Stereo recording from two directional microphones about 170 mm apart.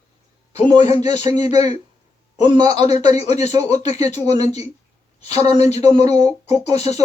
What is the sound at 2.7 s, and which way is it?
Speech, 40° left (ahead or behind).